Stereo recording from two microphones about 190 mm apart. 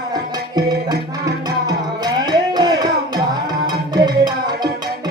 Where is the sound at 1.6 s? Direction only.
20° right (ahead or behind).